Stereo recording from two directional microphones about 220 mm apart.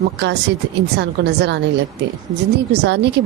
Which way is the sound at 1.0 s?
50° right (ahead or behind).